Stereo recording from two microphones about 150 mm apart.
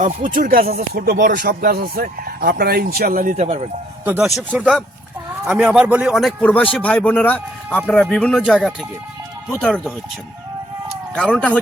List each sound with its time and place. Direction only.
0.0 s speech: 60° right (ahead or behind)
3.3 s speech: 45° right (ahead or behind)
4.0 s a man's voice: 15° right (ahead or behind)
6.1 s speech: 5° left (ahead or behind)
11.1 s speech: 5° left (ahead or behind)